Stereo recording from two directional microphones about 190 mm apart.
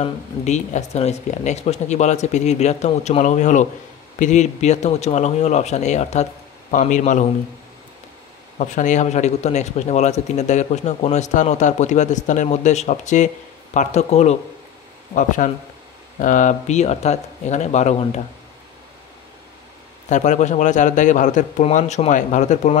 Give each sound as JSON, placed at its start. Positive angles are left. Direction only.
{"t": 0.0, "sound": "a man's voice", "side_deg": 35}
{"t": 8.5, "sound": "a man's voice", "side_deg": 40}
{"t": 20.1, "sound": "a man's voice", "side_deg": 40}